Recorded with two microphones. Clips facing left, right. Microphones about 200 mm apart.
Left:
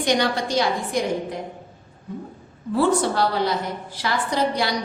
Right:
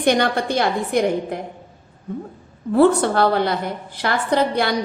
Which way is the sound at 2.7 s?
55° right (ahead or behind).